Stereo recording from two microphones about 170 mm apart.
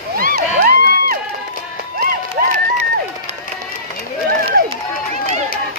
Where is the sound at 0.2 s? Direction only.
65° right (ahead or behind).